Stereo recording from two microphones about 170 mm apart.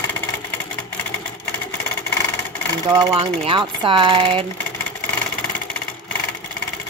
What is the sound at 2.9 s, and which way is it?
A woman's voice, 30° right (ahead or behind).